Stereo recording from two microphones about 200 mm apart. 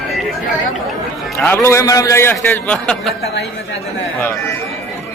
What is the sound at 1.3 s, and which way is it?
A man's voice, 15° left (ahead or behind).